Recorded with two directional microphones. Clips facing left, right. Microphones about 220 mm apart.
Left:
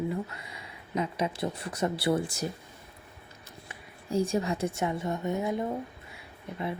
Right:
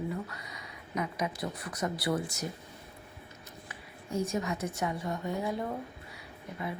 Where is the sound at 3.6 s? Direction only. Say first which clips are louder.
Left 5 dB; 30° left (ahead or behind).